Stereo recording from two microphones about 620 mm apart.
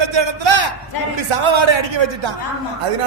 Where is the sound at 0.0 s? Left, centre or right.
Right.